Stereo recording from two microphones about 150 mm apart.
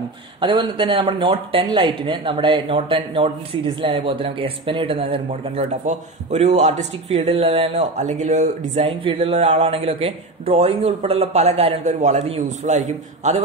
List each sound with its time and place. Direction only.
0.4 s speech: 35° right (ahead or behind)
9.0 s speech: 35° right (ahead or behind)